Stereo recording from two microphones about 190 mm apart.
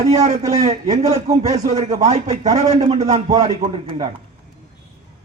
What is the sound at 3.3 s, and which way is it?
Speech, 20° right (ahead or behind).